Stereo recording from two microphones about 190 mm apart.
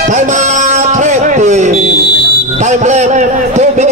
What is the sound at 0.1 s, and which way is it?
Music, 40° right (ahead or behind).